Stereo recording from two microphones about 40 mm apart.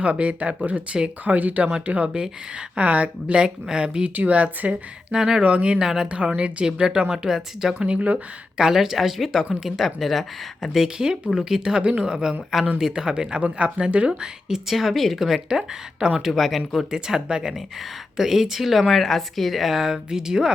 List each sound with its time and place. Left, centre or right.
0.0 s speech: right
3.3 s speech: right
4.1 s speech: right
5.1 s speech: centre
5.4 s speech: right
5.8 s a woman's voice: centre
10.7 s speech: centre
11.8 s speech: right
14.7 s a woman's voice: centre
15.4 s speech: centre
16.3 s a woman's voice: centre
17.2 s speech: right
18.2 s a woman's voice: centre